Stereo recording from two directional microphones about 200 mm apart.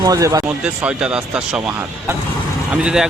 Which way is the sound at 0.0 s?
15° right (ahead or behind).